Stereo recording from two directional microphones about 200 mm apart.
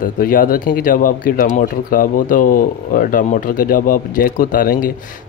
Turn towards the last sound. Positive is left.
turn(degrees=45)  # may be behind; listen again after turning